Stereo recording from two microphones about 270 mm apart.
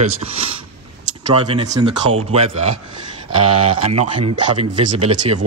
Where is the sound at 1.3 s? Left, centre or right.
Centre.